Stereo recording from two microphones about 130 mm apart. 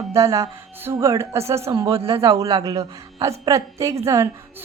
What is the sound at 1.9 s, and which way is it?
Speech, 45° right (ahead or behind).